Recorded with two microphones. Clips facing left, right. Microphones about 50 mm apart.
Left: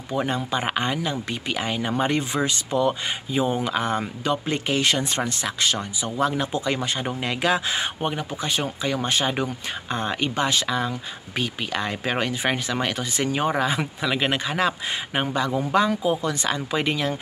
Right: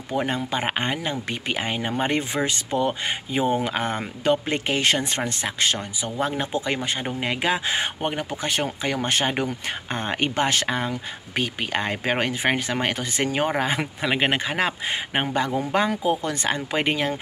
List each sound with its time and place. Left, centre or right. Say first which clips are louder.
0.1 s speech: even; right
7.7 s speech: right 1 dB; right